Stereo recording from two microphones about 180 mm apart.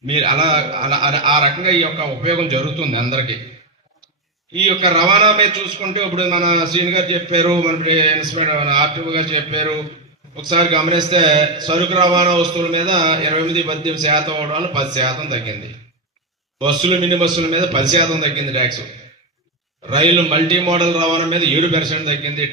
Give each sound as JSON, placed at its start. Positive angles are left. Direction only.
{"t": 0.1, "sound": "a man's voice", "side_deg": -25}
{"t": 4.5, "sound": "a man's voice", "side_deg": -25}
{"t": 16.6, "sound": "a man's voice", "side_deg": -30}
{"t": 19.9, "sound": "a man's voice", "side_deg": -30}